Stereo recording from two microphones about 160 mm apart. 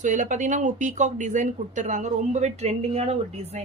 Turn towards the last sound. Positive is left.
turn(degrees=-40)  # may be behind; listen again after turning